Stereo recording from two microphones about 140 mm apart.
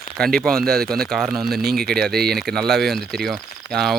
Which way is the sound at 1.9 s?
Centre (ahead or behind).